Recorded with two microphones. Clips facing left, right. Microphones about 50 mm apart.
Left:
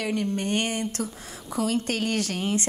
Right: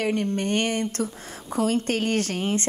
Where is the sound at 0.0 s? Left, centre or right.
Right.